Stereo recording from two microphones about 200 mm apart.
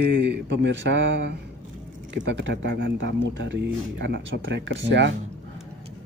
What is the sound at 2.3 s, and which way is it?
Speech, 65° right (ahead or behind).